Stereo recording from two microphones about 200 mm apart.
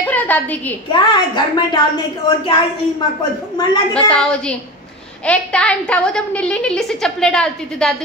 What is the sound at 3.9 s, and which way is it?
A woman's voice, 5° left (ahead or behind).